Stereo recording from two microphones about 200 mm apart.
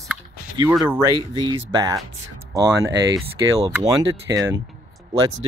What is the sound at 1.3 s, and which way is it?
Speech, 20° right (ahead or behind).